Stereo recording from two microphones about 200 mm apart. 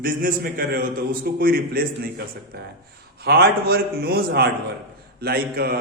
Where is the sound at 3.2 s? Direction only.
50° right (ahead or behind).